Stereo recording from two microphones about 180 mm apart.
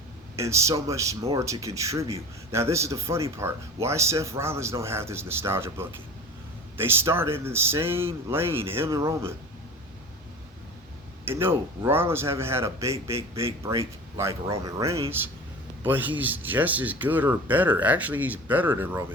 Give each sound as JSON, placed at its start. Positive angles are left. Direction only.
{"t": 0.3, "sound": "speech", "side_deg": -15}
{"t": 11.3, "sound": "speech", "side_deg": -15}